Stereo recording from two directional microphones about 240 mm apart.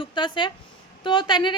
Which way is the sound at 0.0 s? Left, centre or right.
Centre.